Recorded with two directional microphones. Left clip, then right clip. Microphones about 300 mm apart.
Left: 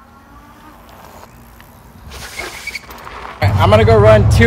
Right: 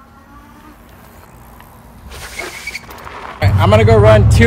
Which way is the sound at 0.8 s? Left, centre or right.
Centre.